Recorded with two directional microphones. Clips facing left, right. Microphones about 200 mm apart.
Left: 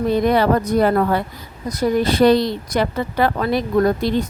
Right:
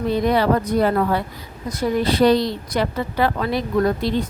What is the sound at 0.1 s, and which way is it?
Speech, 50° left (ahead or behind).